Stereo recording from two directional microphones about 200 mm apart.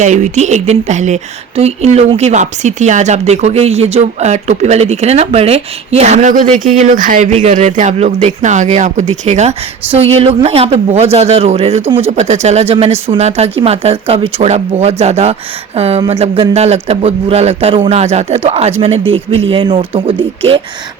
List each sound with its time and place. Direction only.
0.0 s speech: 35° right (ahead or behind)